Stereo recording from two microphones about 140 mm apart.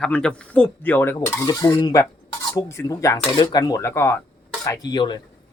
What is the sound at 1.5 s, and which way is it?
Speech, 25° left (ahead or behind).